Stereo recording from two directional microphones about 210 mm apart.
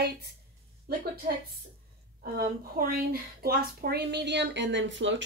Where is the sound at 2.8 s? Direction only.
45° right (ahead or behind).